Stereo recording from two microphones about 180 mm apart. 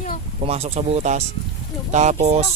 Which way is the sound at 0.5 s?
35° right (ahead or behind).